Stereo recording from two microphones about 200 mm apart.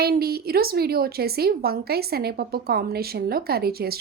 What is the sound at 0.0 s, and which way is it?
A woman's voice, 50° right (ahead or behind).